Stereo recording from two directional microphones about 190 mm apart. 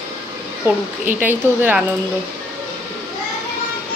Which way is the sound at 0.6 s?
10° right (ahead or behind).